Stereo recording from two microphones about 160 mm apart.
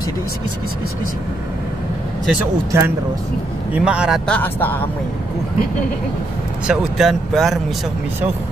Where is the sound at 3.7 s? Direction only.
5° right (ahead or behind).